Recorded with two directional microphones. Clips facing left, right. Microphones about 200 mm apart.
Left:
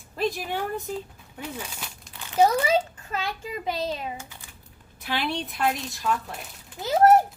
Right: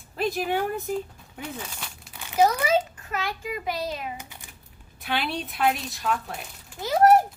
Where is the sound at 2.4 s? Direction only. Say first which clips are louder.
Left 1 dB; 30° left (ahead or behind).